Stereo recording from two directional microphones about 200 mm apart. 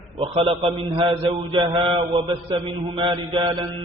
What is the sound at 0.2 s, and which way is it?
Mantra, 30° right (ahead or behind).